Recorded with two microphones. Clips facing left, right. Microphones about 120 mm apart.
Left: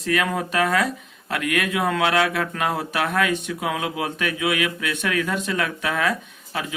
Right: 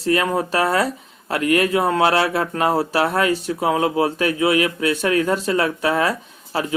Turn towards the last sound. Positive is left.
turn(degrees=-35)  # may be behind; listen again after turning